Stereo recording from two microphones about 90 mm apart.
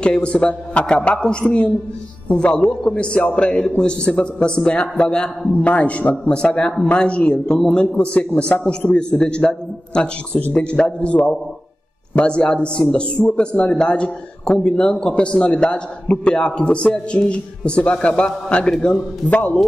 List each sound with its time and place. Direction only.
0.0 s a man's voice: 10° left (ahead or behind)